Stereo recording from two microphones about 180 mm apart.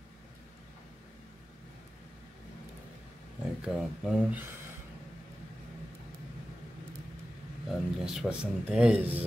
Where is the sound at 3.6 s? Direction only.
5° right (ahead or behind).